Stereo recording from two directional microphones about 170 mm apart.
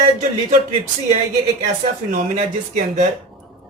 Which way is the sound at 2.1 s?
45° right (ahead or behind).